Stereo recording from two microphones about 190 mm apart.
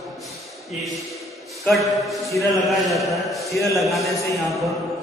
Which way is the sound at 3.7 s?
Centre (ahead or behind).